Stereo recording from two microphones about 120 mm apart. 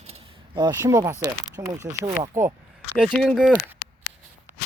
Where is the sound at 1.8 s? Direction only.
80° right.